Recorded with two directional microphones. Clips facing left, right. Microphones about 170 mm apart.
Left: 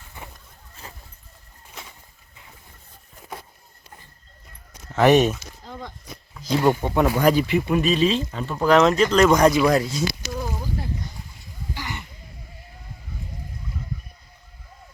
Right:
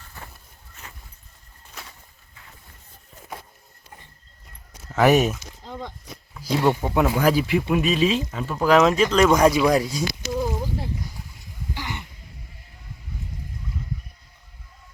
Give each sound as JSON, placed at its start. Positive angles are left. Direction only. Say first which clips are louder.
{"t": 0.8, "sound": "vehicle", "louder": "left 3 dB", "side_deg": 30}
{"t": 5.0, "sound": "speech", "louder": "left 2 dB", "side_deg": -5}
{"t": 6.4, "sound": "speech", "louder": "left 1 dB", "side_deg": -5}